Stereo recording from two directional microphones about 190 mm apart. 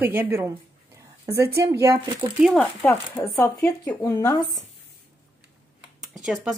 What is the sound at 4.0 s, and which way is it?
Speech, 20° left (ahead or behind).